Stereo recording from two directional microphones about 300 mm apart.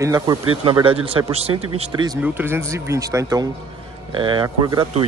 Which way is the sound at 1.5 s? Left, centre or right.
Right.